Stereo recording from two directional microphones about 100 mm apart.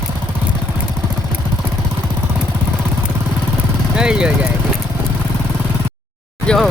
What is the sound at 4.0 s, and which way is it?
Speech, 10° right (ahead or behind).